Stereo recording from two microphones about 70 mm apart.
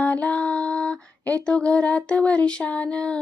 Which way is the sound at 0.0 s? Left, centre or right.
Left.